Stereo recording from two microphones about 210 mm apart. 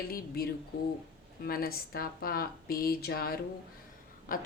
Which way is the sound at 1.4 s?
45° left (ahead or behind).